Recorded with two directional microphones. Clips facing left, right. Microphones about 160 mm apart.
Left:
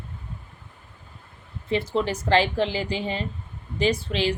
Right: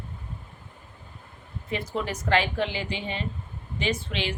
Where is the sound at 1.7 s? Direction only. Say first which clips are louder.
Left 6 dB; 30° left (ahead or behind).